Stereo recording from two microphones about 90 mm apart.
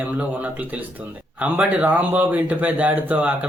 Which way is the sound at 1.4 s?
15° right (ahead or behind).